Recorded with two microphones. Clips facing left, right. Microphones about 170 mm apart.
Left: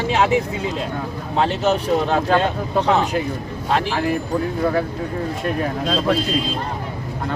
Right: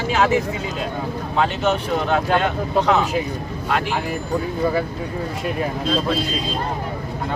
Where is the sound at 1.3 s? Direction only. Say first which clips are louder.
Left 2 dB; 30° left (ahead or behind).